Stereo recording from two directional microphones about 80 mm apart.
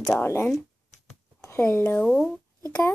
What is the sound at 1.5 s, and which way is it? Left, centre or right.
Speech, left.